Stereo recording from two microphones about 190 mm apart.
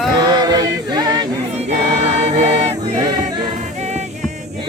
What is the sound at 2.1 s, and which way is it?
Choir, 35° right (ahead or behind).